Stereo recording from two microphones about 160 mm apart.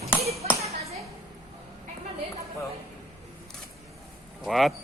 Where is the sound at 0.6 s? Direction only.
40° right (ahead or behind).